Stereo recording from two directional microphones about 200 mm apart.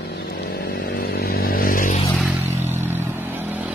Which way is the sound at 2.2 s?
10° right (ahead or behind).